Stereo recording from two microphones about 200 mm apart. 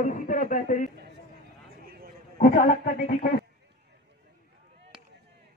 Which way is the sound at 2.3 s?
50° left (ahead or behind).